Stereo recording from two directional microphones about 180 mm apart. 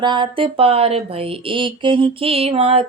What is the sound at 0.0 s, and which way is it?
Speech, 25° right (ahead or behind).